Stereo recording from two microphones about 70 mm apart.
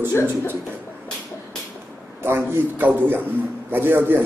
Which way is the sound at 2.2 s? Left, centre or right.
Right.